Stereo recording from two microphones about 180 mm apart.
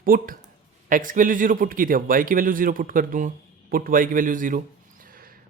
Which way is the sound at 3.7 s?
50° right (ahead or behind).